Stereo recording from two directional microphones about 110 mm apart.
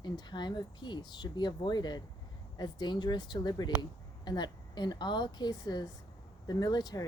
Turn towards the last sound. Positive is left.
turn(degrees=40)  # may be behind; listen again after turning